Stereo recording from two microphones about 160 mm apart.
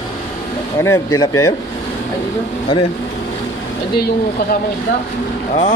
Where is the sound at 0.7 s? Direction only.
20° left (ahead or behind).